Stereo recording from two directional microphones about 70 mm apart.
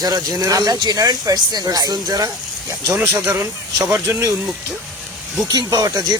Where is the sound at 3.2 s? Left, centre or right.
Right.